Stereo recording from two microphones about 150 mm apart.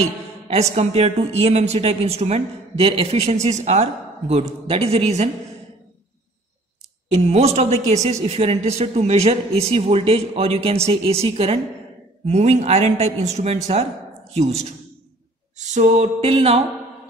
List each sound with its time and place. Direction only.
0.0 s a woman's voice: 45° right (ahead or behind)
7.2 s a woman's voice: 45° right (ahead or behind)